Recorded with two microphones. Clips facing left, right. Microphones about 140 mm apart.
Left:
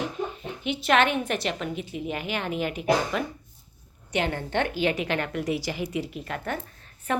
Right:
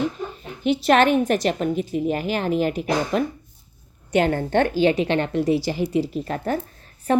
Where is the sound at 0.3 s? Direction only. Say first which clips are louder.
Right 8 dB; 40° right (ahead or behind).